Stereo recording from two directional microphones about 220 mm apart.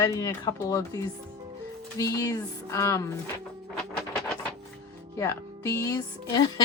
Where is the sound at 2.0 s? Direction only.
15° left (ahead or behind).